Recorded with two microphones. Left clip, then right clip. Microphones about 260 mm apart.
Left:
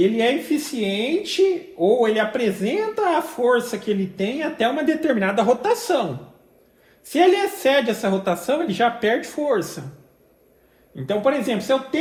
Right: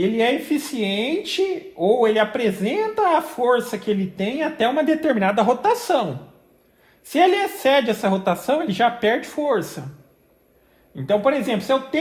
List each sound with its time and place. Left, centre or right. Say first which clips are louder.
0.0 s speech: left 1 dB; right
7.1 s speech: even; right
11.0 s speech: right 2 dB; right